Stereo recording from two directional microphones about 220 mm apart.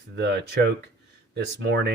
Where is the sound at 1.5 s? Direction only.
50° right (ahead or behind).